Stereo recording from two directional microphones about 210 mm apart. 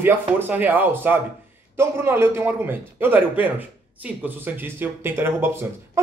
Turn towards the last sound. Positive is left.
turn(degrees=-10)  # may be behind; listen again after turning